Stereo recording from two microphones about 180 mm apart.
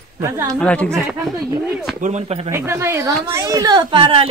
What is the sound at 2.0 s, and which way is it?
Speech, 40° right (ahead or behind).